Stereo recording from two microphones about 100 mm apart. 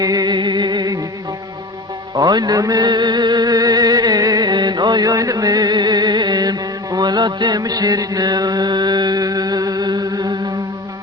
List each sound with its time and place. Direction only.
0.0 s music: 40° right (ahead or behind)
2.1 s music: 45° right (ahead or behind)